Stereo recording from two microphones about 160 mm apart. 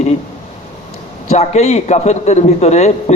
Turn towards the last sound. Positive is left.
turn(degrees=45)  # may be behind; listen again after turning